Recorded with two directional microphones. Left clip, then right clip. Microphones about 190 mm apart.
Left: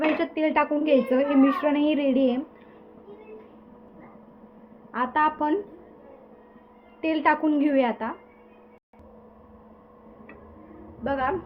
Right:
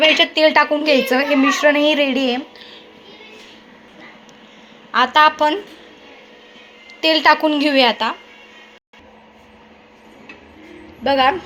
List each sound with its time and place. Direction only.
0.2 s a woman's voice: 15° right (ahead or behind)
4.9 s a woman's voice: 10° right (ahead or behind)
7.0 s a woman's voice: 15° right (ahead or behind)
11.0 s a woman's voice: 25° right (ahead or behind)